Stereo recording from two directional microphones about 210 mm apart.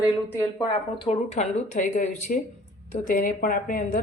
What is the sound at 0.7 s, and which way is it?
Speech, 30° left (ahead or behind).